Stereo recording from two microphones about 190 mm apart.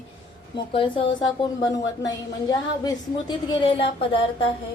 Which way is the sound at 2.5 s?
20° left (ahead or behind).